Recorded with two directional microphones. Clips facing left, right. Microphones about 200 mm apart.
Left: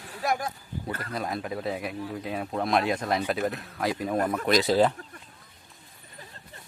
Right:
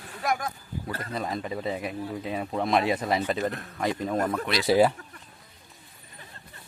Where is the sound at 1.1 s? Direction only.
Centre (ahead or behind).